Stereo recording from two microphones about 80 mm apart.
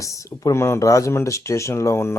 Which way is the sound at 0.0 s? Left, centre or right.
Left.